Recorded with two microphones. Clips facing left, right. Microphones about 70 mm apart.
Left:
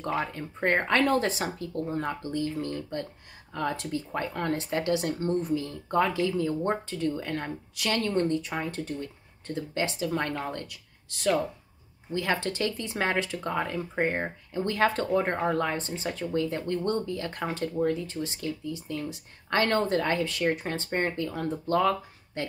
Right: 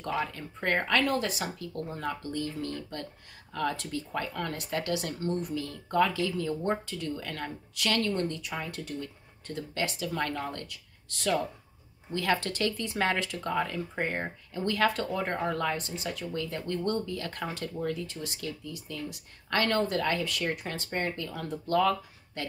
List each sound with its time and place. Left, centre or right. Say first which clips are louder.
0.0 s speech: left 2 dB; left